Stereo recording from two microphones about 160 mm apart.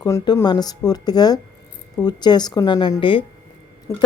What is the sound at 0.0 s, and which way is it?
A woman's voice, 20° left (ahead or behind).